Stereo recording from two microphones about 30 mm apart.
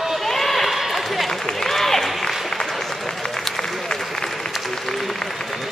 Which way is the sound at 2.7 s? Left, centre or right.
Centre.